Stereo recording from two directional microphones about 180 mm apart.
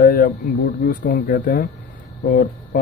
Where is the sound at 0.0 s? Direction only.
50° left (ahead or behind).